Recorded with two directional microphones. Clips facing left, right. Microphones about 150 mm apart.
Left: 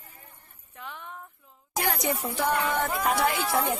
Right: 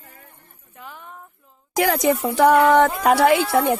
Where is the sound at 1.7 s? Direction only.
90° right; by 3.7 s 65° right (ahead or behind).